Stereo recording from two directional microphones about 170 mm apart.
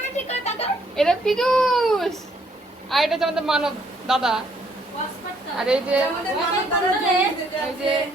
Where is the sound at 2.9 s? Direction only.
Centre (ahead or behind).